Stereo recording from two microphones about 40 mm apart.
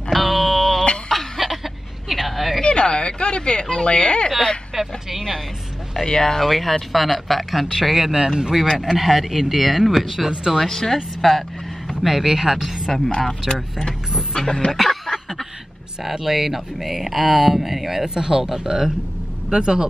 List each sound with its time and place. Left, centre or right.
0.1 s a sound: centre
1.4 s a sound: centre
2.6 s speech: left
4.7 s speech: centre
6.0 s speech: centre
8.0 s speech: centre
8.7 s speech: centre
10.6 s speech: centre
12.0 s speech: centre
12.9 s speech: centre
14.3 s speech: centre
14.7 s a sound: centre
16.0 s speech: centre
18.0 s speech: centre